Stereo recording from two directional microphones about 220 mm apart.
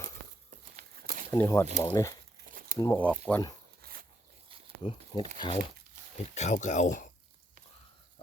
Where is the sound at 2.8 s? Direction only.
10° left (ahead or behind).